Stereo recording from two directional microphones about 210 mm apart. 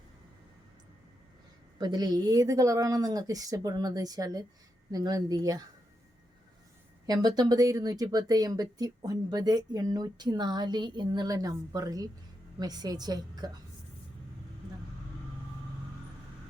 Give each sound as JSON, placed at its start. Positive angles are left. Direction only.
{"t": 1.8, "sound": "speech", "side_deg": -20}
{"t": 7.1, "sound": "a woman's voice", "side_deg": -20}